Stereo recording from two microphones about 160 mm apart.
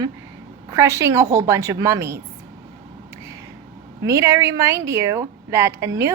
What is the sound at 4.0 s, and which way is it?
Speech, 20° right (ahead or behind).